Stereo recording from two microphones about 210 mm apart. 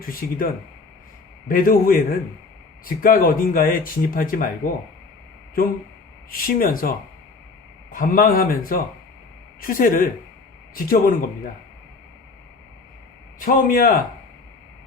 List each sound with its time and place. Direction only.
0.0 s a man's voice: 45° left (ahead or behind)
6.3 s a man's voice: 45° left (ahead or behind)
7.9 s a man's voice: 40° left (ahead or behind)
13.4 s speech: 40° left (ahead or behind)